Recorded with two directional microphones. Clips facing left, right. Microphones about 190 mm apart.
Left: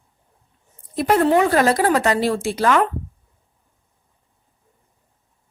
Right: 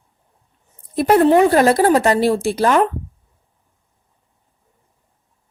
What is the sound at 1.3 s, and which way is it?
Speech, 30° right (ahead or behind).